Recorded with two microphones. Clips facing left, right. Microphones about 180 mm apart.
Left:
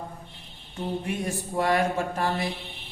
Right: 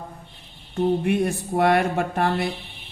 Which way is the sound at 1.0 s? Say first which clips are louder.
Right 8 dB; 65° right (ahead or behind).